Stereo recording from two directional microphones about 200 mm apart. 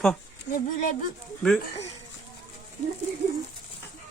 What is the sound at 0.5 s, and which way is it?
Speech, 45° left (ahead or behind).